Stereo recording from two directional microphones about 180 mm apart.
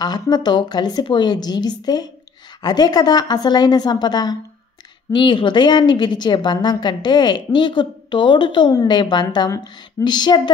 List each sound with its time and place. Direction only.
0.0 s a woman's voice: 25° left (ahead or behind)